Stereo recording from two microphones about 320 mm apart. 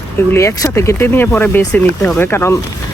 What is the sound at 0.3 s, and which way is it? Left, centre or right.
Speech, centre.